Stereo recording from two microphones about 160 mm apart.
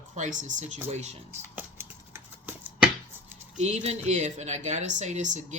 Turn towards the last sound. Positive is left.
turn(degrees=-50)  # may be behind; listen again after turning